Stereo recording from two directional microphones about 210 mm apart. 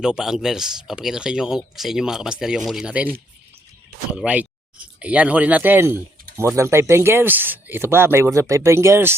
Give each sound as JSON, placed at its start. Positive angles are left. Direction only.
{"t": 0.0, "sound": "speech", "side_deg": -5}
{"t": 4.1, "sound": "speech", "side_deg": -5}